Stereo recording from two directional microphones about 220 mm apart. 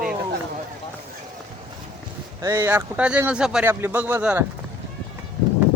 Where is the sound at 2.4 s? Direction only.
10° right (ahead or behind).